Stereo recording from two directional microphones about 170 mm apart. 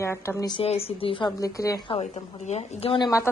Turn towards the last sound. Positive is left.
turn(degrees=20)  # may be behind; listen again after turning